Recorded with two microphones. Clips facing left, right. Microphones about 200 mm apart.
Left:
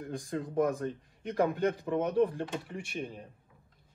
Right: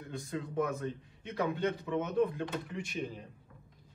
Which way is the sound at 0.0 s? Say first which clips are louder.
Left 3 dB; 45° left (ahead or behind).